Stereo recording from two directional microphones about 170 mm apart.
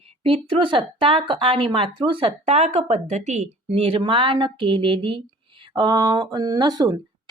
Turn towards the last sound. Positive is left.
turn(degrees=-20)  # may be behind; listen again after turning